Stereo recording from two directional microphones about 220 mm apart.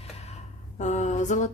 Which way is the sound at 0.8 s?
30° left (ahead or behind).